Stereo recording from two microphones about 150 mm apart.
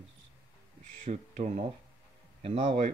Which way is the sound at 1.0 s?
45° right (ahead or behind).